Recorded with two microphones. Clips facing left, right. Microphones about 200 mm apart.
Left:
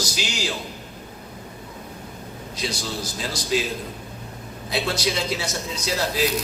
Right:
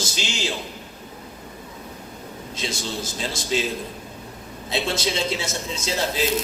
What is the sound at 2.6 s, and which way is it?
A man's voice, 25° right (ahead or behind).